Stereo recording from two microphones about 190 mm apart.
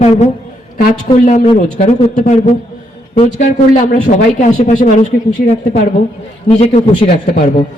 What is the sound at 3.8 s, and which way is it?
Speech, 45° left (ahead or behind).